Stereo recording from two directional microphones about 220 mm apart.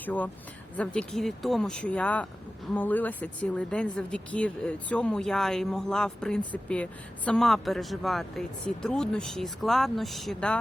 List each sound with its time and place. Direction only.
0.0 s speech: 10° left (ahead or behind)